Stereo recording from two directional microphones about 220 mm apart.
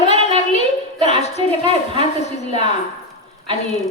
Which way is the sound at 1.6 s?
25° right (ahead or behind).